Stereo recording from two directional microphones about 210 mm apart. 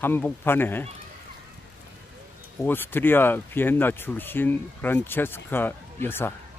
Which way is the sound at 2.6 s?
10° left (ahead or behind).